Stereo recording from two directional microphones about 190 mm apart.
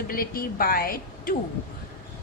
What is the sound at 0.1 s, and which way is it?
A woman's voice, 50° left (ahead or behind).